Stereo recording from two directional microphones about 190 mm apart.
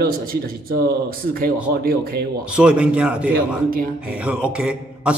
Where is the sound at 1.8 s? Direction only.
55° right (ahead or behind).